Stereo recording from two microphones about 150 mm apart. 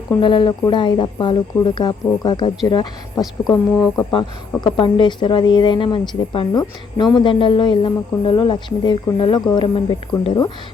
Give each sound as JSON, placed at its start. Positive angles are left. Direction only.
{"t": 0.2, "sound": "speech", "side_deg": 30}